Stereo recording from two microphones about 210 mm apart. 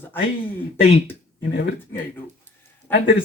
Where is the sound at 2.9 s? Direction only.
10° left (ahead or behind).